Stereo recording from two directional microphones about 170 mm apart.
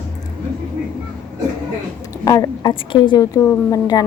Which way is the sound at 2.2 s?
20° left (ahead or behind).